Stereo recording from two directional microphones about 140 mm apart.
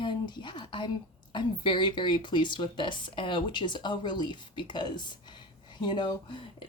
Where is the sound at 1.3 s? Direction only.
35° left (ahead or behind).